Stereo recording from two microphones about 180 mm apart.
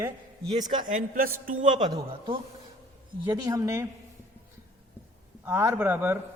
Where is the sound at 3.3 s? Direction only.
20° right (ahead or behind).